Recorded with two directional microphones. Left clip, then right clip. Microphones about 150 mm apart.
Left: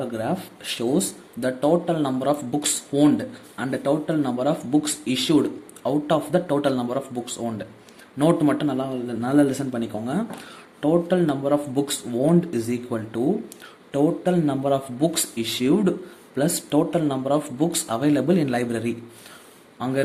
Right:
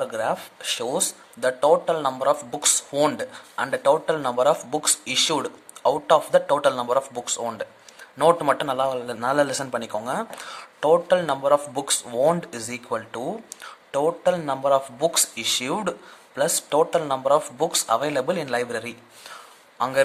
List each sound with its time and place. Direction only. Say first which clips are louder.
0.0 s speech: right 2 dB; 35° right (ahead or behind)